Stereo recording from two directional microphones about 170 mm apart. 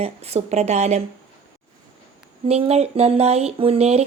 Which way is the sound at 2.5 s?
40° right (ahead or behind).